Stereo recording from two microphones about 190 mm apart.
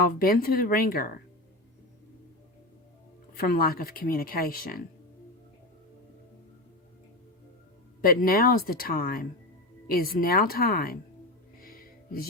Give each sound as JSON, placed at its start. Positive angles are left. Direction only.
{"t": 0.2, "sound": "speech", "side_deg": 50}
{"t": 3.3, "sound": "speech", "side_deg": 50}
{"t": 8.0, "sound": "speech", "side_deg": 50}
{"t": 11.6, "sound": "music", "side_deg": 50}